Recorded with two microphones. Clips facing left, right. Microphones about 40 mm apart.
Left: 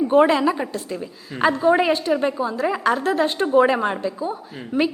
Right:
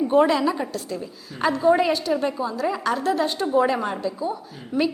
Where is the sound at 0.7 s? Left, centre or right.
Left.